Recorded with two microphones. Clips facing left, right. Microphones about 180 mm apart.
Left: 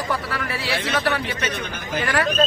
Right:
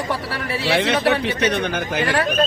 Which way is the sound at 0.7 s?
65° right (ahead or behind).